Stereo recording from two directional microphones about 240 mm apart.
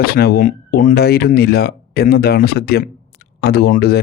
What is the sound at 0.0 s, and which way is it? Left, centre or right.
Speech, left.